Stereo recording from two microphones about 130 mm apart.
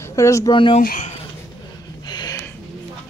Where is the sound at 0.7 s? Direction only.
70° left (ahead or behind).